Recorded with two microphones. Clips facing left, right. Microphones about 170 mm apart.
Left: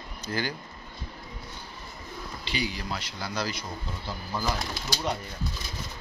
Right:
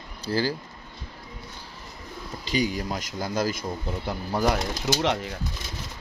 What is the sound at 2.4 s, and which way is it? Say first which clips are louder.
Speech: right 7 dB; 45° right (ahead or behind).